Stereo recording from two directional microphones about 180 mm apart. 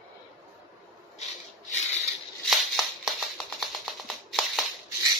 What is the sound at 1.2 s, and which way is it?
Rub, 40° left (ahead or behind).